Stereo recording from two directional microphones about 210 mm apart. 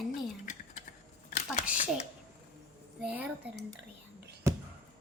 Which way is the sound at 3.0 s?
5° right (ahead or behind).